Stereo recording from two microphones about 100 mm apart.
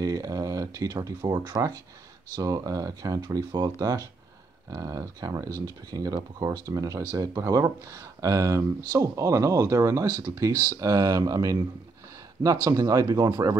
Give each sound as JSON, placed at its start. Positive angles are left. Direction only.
{"t": 0.0, "sound": "speech", "side_deg": -35}
{"t": 12.6, "sound": "speech", "side_deg": -35}